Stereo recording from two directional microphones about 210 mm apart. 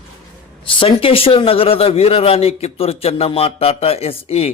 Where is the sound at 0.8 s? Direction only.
25° left (ahead or behind).